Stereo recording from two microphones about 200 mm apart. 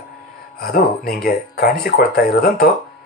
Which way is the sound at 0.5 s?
45° left (ahead or behind).